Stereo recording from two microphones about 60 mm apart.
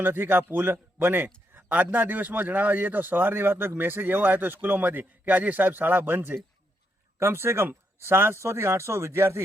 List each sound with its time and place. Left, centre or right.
0.0 s a man's voice: right